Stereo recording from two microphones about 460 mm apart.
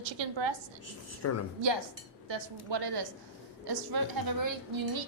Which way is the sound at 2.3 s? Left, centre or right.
Right.